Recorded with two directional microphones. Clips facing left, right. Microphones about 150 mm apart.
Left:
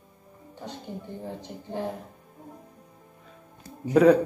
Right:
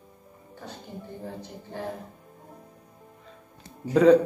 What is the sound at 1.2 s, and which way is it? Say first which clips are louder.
Speech: left 1 dB; 20° left (ahead or behind).